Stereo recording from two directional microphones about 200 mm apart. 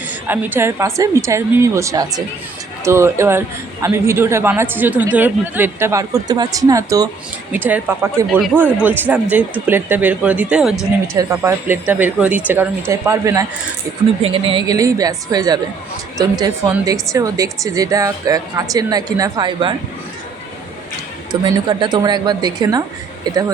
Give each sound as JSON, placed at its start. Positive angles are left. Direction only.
{"t": 0.1, "sound": "a man's voice", "side_deg": -10}
{"t": 8.3, "sound": "a man's voice", "side_deg": 0}
{"t": 11.1, "sound": "a man's voice", "side_deg": -15}
{"t": 14.2, "sound": "a woman's voice", "side_deg": -25}
{"t": 21.4, "sound": "a woman's voice", "side_deg": -25}